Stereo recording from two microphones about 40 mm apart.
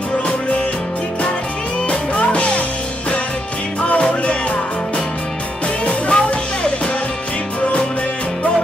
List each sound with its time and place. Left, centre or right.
1.9 s music: left
5.9 s music: left